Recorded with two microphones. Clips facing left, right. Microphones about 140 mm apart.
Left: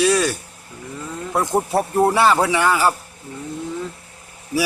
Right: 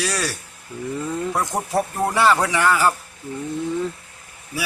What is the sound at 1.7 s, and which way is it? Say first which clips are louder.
Speech: left 3 dB; 30° left (ahead or behind).